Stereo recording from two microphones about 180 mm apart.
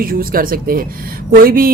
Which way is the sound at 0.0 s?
55° right (ahead or behind).